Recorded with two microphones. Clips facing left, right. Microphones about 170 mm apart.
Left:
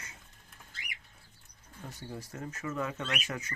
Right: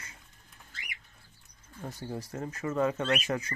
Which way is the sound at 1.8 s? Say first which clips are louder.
Right 5 dB; 35° right (ahead or behind).